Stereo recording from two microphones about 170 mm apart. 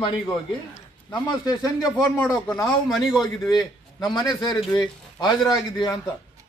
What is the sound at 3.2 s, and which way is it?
A man's voice, 25° left (ahead or behind).